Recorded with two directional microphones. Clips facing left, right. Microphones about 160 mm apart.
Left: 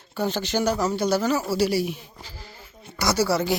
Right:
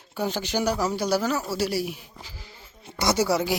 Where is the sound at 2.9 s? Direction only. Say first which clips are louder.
Even; 20° right (ahead or behind).